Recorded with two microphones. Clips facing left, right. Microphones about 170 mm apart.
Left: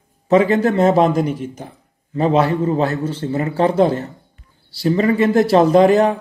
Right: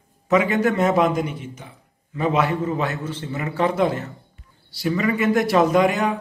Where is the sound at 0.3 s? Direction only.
30° left (ahead or behind).